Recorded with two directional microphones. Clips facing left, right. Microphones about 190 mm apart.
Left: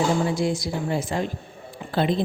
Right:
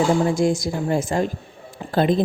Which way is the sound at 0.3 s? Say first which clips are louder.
Right 4 dB; 45° right (ahead or behind).